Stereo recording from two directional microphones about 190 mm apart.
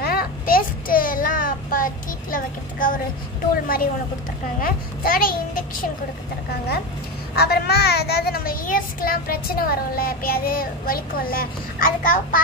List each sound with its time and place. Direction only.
0.0 s child singing: 50° left (ahead or behind)
2.3 s a sound: 45° left (ahead or behind)
3.6 s a child's voice: 50° left (ahead or behind)
7.3 s a child's voice: 55° left (ahead or behind)